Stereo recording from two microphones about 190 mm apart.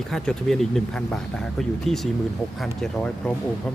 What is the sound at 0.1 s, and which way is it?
Speech, 5° left (ahead or behind).